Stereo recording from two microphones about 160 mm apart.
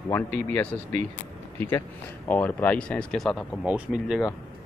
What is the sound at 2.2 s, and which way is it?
Speech, 10° left (ahead or behind).